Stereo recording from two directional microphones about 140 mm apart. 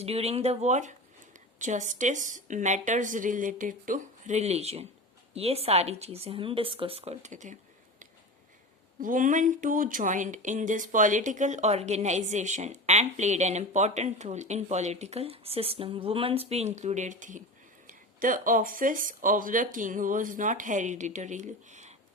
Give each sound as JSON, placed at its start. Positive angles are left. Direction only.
{"t": 0.0, "sound": "speech", "side_deg": -45}
{"t": 9.0, "sound": "speech", "side_deg": -75}
{"t": 17.8, "sound": "speech", "side_deg": -75}